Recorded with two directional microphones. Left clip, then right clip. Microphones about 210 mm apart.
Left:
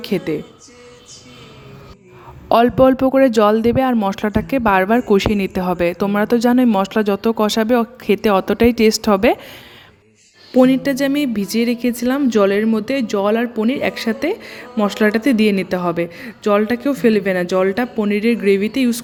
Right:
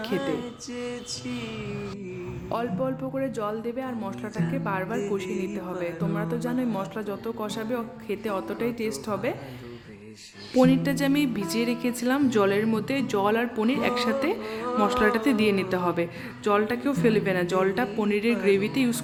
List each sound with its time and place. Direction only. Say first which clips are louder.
0.0 s speech: left 7 dB; 35° left (ahead or behind)
2.5 s speech: left 17 dB; 45° left (ahead or behind)
10.6 s a woman's voice: left 8 dB; 25° left (ahead or behind)